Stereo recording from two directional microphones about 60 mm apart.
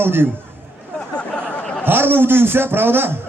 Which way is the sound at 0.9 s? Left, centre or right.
Centre.